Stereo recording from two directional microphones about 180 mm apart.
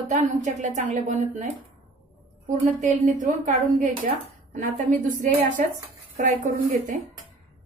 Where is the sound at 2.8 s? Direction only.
45° right (ahead or behind).